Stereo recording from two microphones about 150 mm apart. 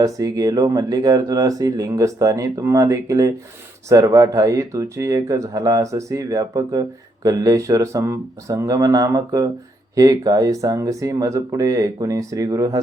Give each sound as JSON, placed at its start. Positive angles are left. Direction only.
{"t": 0.0, "sound": "speech", "side_deg": -25}